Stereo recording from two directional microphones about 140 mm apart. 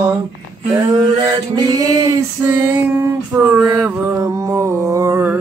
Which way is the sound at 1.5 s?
25° right (ahead or behind).